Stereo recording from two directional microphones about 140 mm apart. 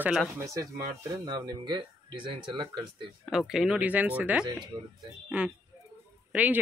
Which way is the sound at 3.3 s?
5° right (ahead or behind).